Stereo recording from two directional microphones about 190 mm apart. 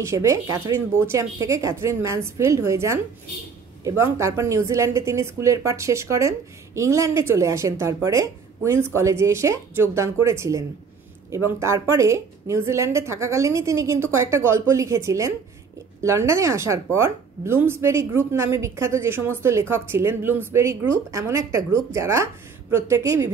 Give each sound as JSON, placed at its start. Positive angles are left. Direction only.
{"t": 0.0, "sound": "speech", "side_deg": -15}